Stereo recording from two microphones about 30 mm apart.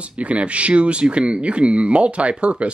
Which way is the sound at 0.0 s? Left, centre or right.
Right.